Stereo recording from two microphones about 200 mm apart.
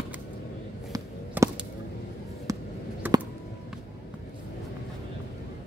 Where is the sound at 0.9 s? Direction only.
15° right (ahead or behind).